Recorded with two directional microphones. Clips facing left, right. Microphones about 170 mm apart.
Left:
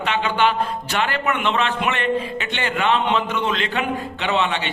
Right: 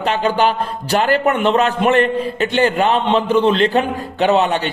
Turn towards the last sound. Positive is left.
turn(degrees=-40)  # may be behind; listen again after turning